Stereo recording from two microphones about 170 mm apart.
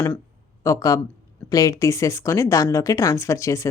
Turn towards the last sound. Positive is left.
turn(degrees=15)  # may be behind; listen again after turning